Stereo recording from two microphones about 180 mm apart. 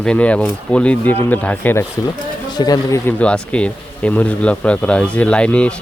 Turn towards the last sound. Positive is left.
turn(degrees=5)  # may be behind; listen again after turning